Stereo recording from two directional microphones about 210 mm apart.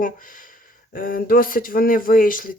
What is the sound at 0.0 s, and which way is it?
Speech, 40° left (ahead or behind).